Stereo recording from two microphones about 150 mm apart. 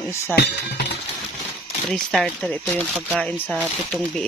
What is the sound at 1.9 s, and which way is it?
Speech, 5° left (ahead or behind).